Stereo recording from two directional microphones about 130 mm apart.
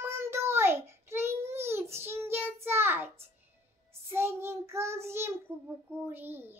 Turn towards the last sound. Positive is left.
turn(degrees=-15)  # may be behind; listen again after turning